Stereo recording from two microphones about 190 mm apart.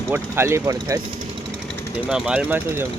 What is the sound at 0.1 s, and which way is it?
Speech, 15° right (ahead or behind).